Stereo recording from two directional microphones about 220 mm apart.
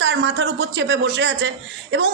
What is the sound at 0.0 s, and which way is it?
A woman's voice, 50° right (ahead or behind).